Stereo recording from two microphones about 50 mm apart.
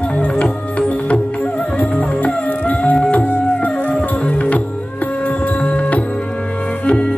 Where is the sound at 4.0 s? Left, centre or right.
Left.